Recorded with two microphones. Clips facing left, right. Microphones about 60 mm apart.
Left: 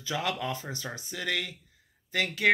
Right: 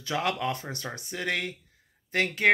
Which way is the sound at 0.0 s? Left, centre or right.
Right.